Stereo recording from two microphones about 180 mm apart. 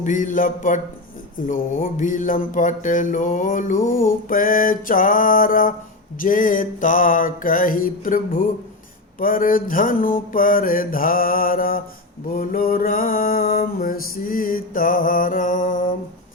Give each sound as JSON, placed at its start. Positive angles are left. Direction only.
{"t": 0.0, "sound": "mantra", "side_deg": 45}